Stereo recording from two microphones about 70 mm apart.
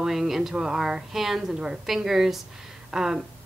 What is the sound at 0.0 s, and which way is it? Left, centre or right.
A woman's voice, centre.